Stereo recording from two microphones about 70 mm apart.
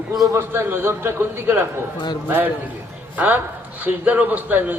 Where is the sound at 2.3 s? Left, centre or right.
Right.